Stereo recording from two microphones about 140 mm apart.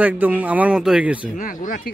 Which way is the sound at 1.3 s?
70° left (ahead or behind).